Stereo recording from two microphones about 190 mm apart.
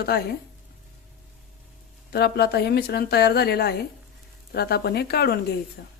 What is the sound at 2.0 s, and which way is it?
Speech, 60° left (ahead or behind).